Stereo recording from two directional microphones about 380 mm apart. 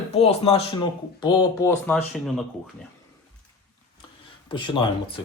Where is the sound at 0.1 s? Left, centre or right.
Centre.